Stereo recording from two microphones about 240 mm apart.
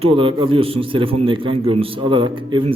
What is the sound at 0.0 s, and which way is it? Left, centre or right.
A man's voice, right.